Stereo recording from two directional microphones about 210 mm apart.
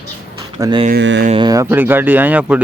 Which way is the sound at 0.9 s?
55° right (ahead or behind).